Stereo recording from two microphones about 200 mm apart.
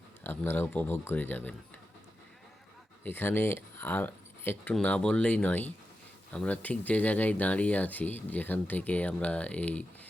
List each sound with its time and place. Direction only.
0.3 s speech: 10° left (ahead or behind)
3.0 s speech: 10° left (ahead or behind)